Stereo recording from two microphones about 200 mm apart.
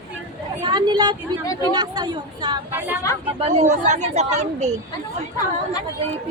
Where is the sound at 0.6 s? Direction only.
20° right (ahead or behind).